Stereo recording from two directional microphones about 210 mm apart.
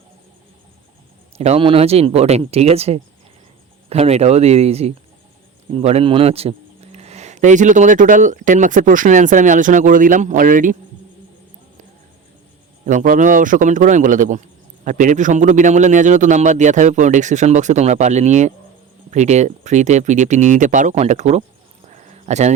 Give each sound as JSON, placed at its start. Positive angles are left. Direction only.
{"t": 1.4, "sound": "speech", "side_deg": -30}
{"t": 12.8, "sound": "speech", "side_deg": -35}
{"t": 21.9, "sound": "a sound", "side_deg": -35}